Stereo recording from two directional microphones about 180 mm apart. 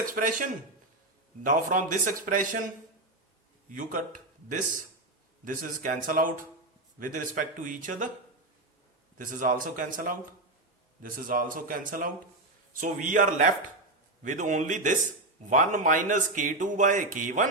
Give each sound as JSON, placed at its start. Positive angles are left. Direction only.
{"t": 0.0, "sound": "speech", "side_deg": -50}
{"t": 9.1, "sound": "speech", "side_deg": -45}